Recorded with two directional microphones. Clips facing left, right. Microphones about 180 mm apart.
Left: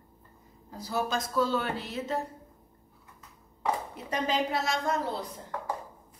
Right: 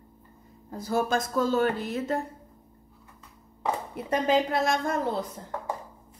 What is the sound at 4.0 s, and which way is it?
A woman's voice, 55° right (ahead or behind).